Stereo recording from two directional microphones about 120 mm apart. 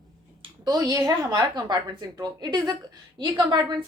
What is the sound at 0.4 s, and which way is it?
A woman's voice, 35° right (ahead or behind).